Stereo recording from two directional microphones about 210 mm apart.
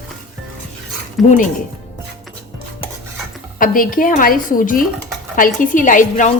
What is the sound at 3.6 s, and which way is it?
Speech, 40° left (ahead or behind).